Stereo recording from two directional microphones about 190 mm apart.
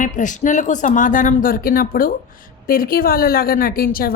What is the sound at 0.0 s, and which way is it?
A woman's voice, 40° left (ahead or behind).